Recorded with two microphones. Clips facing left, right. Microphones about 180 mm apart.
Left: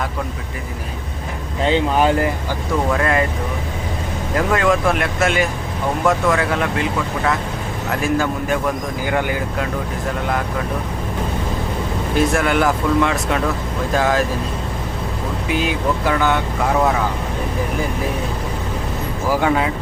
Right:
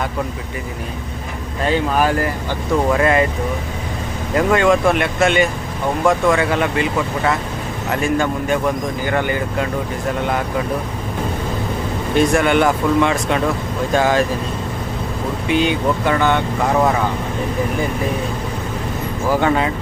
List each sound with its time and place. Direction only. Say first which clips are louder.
1.6 s speech: left 1 dB; 25° left (ahead or behind)
2.9 s speech: right 3 dB; 5° right (ahead or behind)
4.4 s speech: right 3 dB; centre (ahead or behind)
7.9 s speech: right 1 dB; centre (ahead or behind)
12.1 s speech: right 3 dB; 5° left (ahead or behind)
15.4 s speech: right 3 dB; 5° left (ahead or behind)
19.3 s speech: right 1 dB; 5° left (ahead or behind)